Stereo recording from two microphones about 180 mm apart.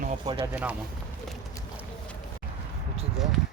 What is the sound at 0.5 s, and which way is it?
Speech, 10° right (ahead or behind).